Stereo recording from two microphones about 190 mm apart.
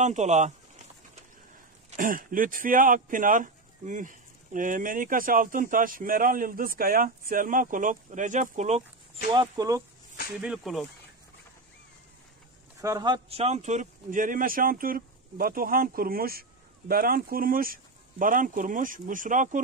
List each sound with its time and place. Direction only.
0.0 s a sound: 40° right (ahead or behind)
1.9 s speech: 45° right (ahead or behind)
9.3 s speech: 20° right (ahead or behind)
10.4 s speech: 5° right (ahead or behind)
12.8 s speech: 20° right (ahead or behind); by 19.6 s 45° right (ahead or behind)